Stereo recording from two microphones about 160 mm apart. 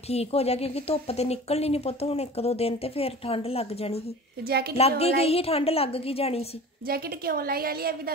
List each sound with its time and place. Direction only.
0.1 s speech: 40° left (ahead or behind)
4.5 s a woman's voice: 80° right
4.7 s speech: 40° left (ahead or behind)
6.9 s a woman's voice: 70° right (ahead or behind)